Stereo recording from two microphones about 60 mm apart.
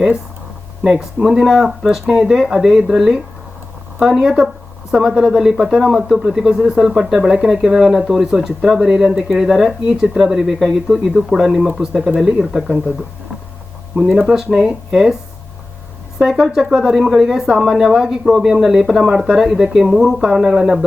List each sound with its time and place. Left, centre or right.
0.9 s speech: centre
14.1 s speech: centre
14.3 s speech: centre
16.1 s speech: centre
17.5 s speech: centre